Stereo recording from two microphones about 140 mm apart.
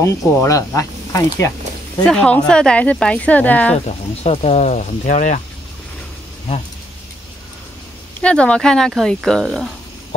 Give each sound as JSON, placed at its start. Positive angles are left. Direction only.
{"t": 0.0, "sound": "speech", "side_deg": 20}
{"t": 2.0, "sound": "speech", "side_deg": 10}
{"t": 3.8, "sound": "speech", "side_deg": 50}
{"t": 8.2, "sound": "speech", "side_deg": 10}